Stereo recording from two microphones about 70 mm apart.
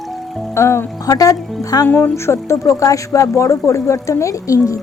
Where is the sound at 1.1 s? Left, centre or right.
Left.